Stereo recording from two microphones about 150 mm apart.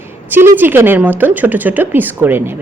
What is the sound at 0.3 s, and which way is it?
A woman's voice, 15° right (ahead or behind).